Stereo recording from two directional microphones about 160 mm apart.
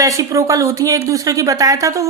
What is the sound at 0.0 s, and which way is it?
Speech, 20° right (ahead or behind).